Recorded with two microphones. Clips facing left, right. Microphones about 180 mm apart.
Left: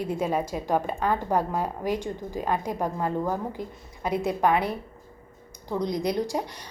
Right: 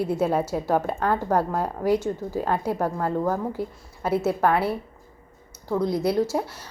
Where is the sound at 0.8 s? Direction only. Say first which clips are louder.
Right 2 dB; 15° left (ahead or behind).